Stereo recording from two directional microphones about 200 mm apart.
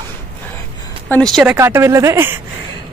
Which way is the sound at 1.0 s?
5° left (ahead or behind).